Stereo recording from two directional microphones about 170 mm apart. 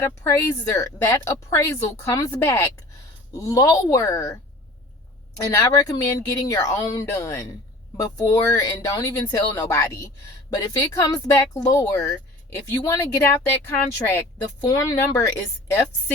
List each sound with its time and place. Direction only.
0.0 s speech: 20° left (ahead or behind)
5.5 s speech: 20° left (ahead or behind)